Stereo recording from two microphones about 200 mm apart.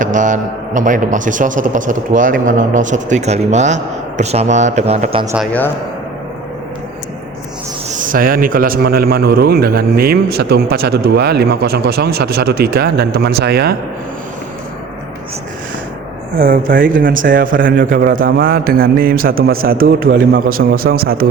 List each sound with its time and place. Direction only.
0.0 s a man's voice: 40° right (ahead or behind)
7.9 s a man's voice: 40° right (ahead or behind)
16.4 s a man's voice: 45° right (ahead or behind)